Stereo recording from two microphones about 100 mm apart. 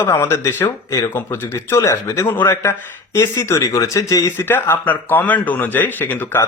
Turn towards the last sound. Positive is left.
turn(degrees=20)  # may be behind; listen again after turning